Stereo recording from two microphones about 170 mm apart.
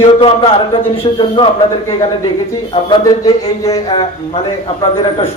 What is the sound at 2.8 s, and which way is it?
Speech, 25° left (ahead or behind).